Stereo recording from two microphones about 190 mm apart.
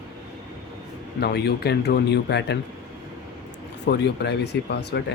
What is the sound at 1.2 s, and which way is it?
Speech, 60° left (ahead or behind).